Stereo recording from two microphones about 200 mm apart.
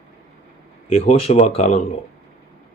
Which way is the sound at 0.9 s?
30° left (ahead or behind).